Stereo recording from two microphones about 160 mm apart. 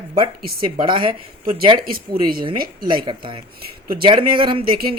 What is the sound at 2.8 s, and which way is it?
A woman's voice, 30° right (ahead or behind).